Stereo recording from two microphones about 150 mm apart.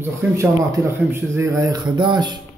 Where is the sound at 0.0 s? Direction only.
15° right (ahead or behind).